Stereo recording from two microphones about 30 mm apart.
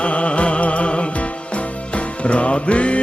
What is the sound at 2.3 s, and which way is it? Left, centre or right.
Music, left.